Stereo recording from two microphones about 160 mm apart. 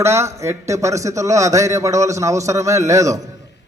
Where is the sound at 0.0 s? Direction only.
15° right (ahead or behind).